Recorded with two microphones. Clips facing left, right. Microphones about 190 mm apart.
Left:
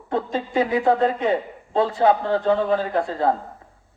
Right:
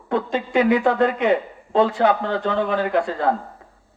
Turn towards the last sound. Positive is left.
turn(degrees=-80)